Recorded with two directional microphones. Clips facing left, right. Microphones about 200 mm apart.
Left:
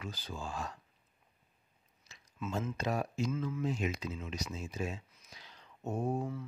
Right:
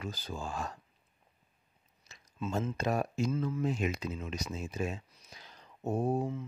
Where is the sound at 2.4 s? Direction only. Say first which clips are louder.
Right 3 dB; 30° right (ahead or behind).